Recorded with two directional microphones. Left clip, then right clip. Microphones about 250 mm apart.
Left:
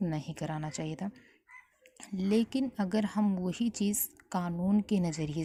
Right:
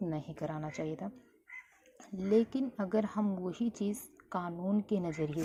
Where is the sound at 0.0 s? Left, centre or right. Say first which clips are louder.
Left 1 dB; left.